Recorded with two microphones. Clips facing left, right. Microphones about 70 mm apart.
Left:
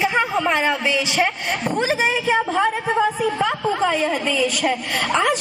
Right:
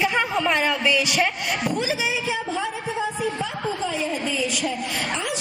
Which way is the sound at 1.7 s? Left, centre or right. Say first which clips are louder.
Left 6 dB; left.